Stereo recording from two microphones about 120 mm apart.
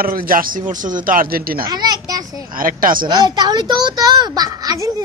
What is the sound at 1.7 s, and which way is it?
A child's voice, 35° right (ahead or behind).